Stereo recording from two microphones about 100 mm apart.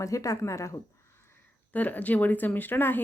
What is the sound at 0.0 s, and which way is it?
Speech, 35° left (ahead or behind).